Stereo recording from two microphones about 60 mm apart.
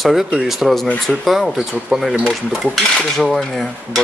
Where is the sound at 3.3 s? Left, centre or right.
Centre.